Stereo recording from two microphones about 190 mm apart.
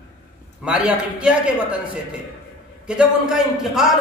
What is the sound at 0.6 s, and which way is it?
A man's voice, 5° right (ahead or behind).